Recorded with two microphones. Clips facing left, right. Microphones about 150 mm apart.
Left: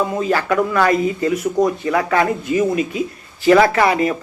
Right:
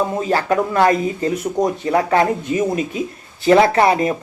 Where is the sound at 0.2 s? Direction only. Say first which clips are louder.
Even; 30° right (ahead or behind).